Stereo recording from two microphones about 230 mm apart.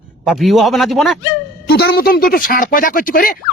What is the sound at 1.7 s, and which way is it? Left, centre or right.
Speech, left.